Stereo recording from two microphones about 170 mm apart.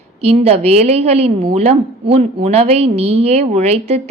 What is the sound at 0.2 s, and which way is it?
A woman's voice, 40° right (ahead or behind).